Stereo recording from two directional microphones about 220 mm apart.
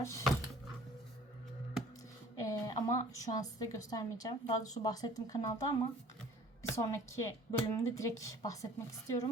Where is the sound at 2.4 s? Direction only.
15° left (ahead or behind).